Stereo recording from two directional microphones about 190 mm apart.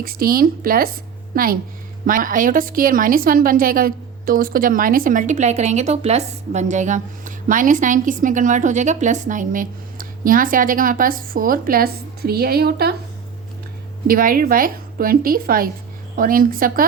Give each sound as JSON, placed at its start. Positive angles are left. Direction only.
{"t": 0.0, "sound": "a woman's voice", "side_deg": -50}
{"t": 14.1, "sound": "a woman's voice", "side_deg": -50}